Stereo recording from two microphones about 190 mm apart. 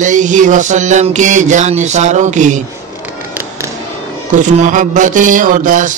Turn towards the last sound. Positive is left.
turn(degrees=-45)  # may be behind; listen again after turning